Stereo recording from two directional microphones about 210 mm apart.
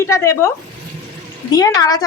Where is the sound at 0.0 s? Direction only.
15° left (ahead or behind).